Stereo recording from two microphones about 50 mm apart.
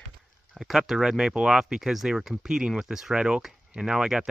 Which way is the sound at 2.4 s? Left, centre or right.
Centre.